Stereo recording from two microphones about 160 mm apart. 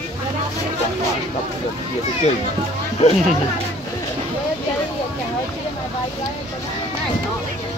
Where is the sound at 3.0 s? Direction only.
40° left (ahead or behind).